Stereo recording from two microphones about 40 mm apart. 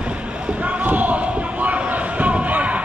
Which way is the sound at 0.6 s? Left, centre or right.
Right.